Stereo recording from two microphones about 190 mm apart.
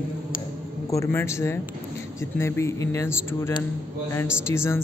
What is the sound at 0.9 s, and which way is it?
A man's voice, 15° left (ahead or behind).